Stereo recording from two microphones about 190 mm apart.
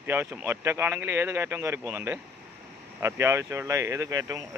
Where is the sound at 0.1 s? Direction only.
10° right (ahead or behind).